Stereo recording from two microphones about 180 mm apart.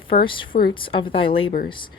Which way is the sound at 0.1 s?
50° left (ahead or behind).